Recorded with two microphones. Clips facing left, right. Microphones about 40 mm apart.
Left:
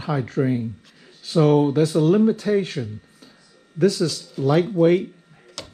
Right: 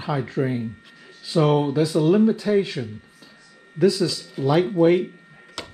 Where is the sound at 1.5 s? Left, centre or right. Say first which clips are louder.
Left 4 dB; right.